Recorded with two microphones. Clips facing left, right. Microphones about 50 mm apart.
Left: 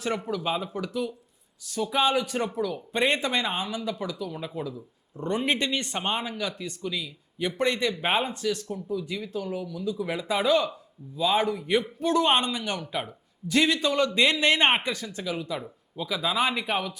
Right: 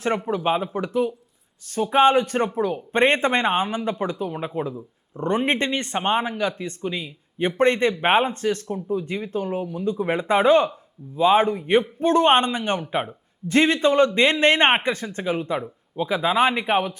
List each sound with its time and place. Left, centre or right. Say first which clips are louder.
0.3 s a man's voice: right 6 dB; right